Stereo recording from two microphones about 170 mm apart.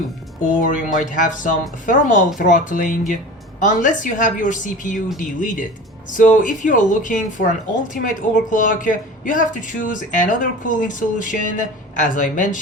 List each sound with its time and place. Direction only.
0.6 s speech: 50° left (ahead or behind)